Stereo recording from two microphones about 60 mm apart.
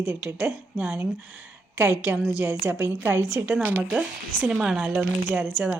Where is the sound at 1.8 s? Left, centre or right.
Right.